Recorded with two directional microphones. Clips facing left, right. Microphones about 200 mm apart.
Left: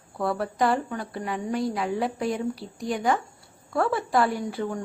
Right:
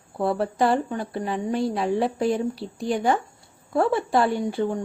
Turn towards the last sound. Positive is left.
turn(degrees=-25)  # may be behind; listen again after turning